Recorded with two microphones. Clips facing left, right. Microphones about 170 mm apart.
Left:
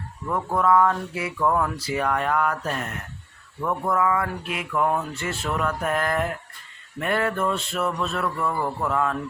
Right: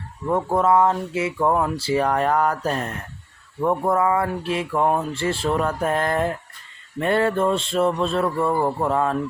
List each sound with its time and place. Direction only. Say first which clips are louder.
0.3 s speech: right 3 dB; 25° right (ahead or behind)